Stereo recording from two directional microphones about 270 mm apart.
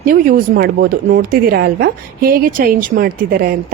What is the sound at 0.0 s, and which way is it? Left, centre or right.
A woman's voice, right.